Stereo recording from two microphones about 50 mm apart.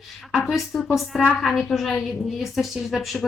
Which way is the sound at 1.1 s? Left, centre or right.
Centre.